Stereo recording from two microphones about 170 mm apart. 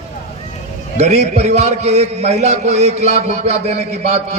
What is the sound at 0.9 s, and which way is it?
A man's voice, 40° right (ahead or behind).